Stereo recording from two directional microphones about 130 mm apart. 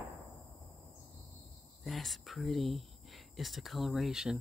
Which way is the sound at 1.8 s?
Centre (ahead or behind).